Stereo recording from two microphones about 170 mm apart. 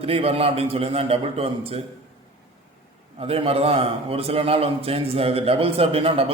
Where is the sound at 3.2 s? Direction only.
35° right (ahead or behind).